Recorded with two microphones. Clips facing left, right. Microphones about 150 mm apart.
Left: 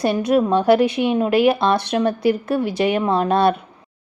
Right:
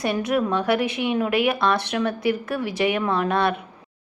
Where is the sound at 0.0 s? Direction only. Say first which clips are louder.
Left 5 dB; 30° left (ahead or behind).